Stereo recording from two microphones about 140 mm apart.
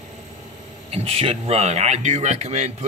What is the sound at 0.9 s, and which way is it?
Speech, 45° right (ahead or behind).